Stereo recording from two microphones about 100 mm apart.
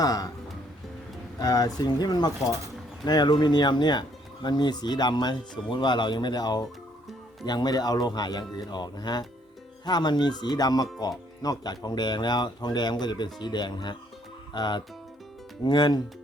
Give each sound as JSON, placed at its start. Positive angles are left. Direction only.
{"t": 0.0, "sound": "speech", "side_deg": 40}
{"t": 1.4, "sound": "speech", "side_deg": 40}